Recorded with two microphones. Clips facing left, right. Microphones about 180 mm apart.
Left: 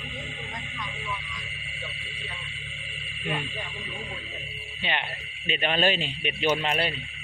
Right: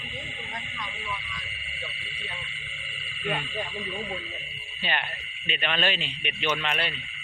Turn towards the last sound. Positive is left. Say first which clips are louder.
# left 4 dB
turn(degrees=35)  # may be behind; listen again after turning